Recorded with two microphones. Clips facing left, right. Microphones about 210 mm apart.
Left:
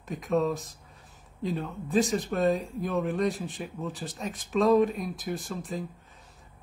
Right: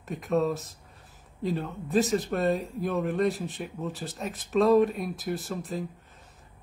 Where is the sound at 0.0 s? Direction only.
Centre (ahead or behind).